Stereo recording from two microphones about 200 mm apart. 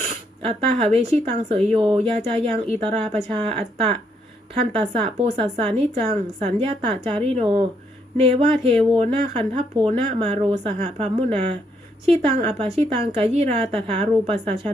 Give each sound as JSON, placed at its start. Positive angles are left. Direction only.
{"t": 0.4, "sound": "speech", "side_deg": -30}